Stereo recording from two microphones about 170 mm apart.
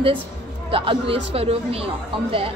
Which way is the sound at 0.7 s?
30° right (ahead or behind).